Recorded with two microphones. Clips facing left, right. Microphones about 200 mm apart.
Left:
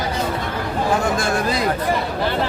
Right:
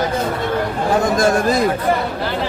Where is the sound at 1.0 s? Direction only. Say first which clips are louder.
Right 5 dB; 40° right (ahead or behind).